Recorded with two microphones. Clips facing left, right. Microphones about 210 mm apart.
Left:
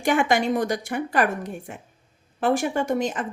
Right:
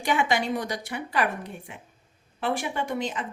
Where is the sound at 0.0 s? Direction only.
50° left (ahead or behind).